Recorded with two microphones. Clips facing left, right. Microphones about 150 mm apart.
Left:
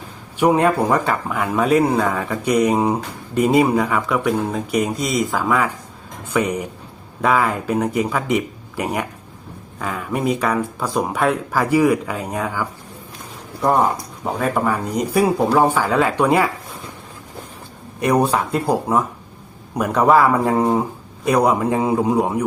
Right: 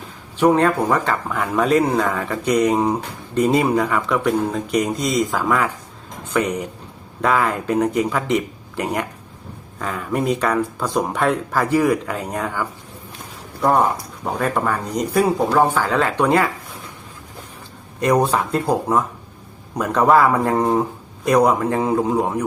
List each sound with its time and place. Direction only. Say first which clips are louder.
0.3 s speech: even; 10° left (ahead or behind)
14.3 s speech: left 1 dB; 5° left (ahead or behind)
18.0 s speech: even; 10° left (ahead or behind)